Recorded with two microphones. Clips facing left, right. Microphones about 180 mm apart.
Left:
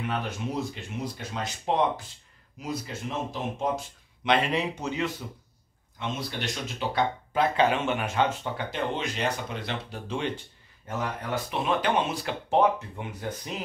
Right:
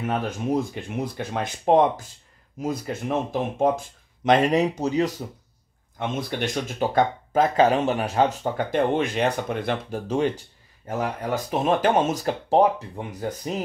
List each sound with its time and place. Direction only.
0.0 s speech: 45° right (ahead or behind)
5.9 s speech: 50° right (ahead or behind)